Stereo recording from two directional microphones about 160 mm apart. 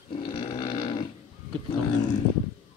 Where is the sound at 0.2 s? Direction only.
35° left (ahead or behind).